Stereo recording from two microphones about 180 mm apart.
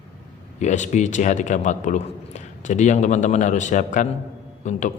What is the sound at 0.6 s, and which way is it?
A man's voice, 40° left (ahead or behind).